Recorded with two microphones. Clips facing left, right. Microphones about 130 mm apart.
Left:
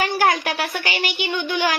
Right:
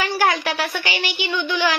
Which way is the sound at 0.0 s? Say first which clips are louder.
Left 1 dB; 50° left (ahead or behind).